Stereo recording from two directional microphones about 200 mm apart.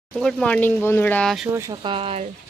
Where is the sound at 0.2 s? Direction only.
Centre (ahead or behind).